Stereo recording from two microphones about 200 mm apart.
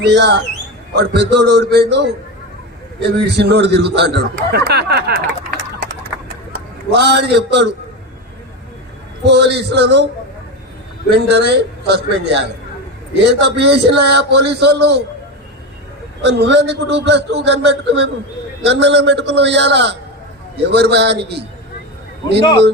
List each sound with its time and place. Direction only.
0.1 s a man's voice: 55° right (ahead or behind)
9.3 s a man's voice: 60° right (ahead or behind)
11.1 s a man's voice: 55° right (ahead or behind)
13.4 s a man's voice: 55° right (ahead or behind)
16.2 s a man's voice: 60° right (ahead or behind)